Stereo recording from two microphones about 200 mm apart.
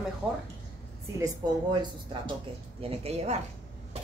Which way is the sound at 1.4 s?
20° right (ahead or behind).